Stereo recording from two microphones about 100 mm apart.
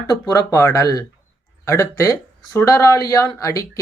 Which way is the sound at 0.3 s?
30° left (ahead or behind).